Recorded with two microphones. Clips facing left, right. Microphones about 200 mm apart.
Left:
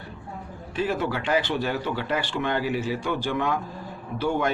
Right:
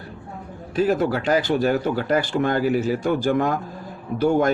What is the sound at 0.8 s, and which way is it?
Speech, 40° right (ahead or behind).